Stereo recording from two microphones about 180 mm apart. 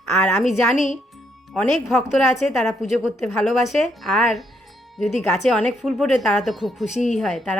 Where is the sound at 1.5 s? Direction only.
5° left (ahead or behind).